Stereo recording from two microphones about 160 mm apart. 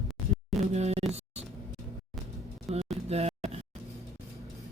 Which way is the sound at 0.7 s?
40° right (ahead or behind).